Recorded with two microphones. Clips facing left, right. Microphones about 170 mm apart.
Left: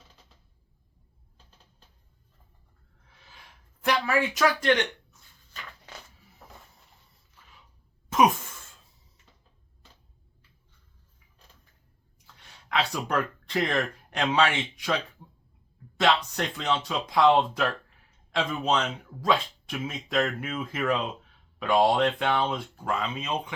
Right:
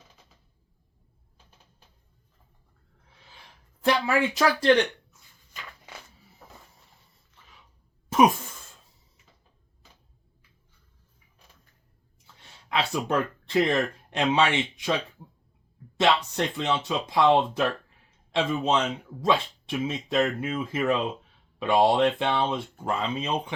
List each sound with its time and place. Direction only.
3.8 s speech: 30° right (ahead or behind)
12.6 s speech: 25° right (ahead or behind)
16.0 s speech: 25° right (ahead or behind)